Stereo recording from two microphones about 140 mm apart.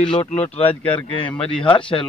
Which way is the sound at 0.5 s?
40° left (ahead or behind).